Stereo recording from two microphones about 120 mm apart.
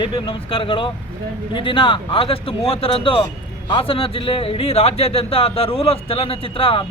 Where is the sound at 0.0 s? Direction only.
45° left (ahead or behind).